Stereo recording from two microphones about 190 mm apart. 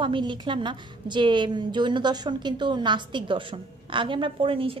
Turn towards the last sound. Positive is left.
turn(degrees=-30)  # may be behind; listen again after turning